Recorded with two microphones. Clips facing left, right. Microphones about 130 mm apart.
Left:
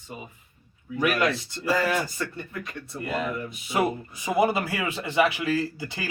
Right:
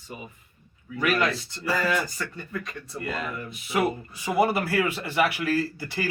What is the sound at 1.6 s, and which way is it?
Speech, 20° left (ahead or behind).